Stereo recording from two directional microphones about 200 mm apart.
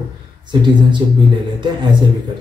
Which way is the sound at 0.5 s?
20° right (ahead or behind).